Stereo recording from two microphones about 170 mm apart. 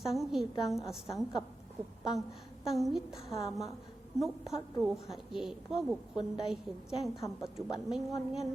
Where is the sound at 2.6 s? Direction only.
Centre (ahead or behind).